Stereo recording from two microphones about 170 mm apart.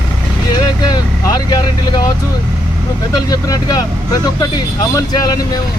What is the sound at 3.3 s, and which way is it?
Speech, 20° left (ahead or behind).